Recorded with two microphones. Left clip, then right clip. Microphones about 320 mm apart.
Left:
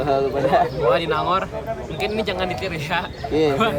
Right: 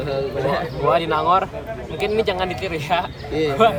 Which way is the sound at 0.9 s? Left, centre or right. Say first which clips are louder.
Right 6 dB; centre.